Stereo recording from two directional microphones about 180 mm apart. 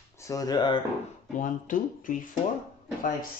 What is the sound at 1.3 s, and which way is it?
Speech, 45° left (ahead or behind).